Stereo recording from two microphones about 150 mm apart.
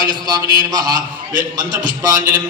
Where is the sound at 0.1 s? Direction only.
30° right (ahead or behind).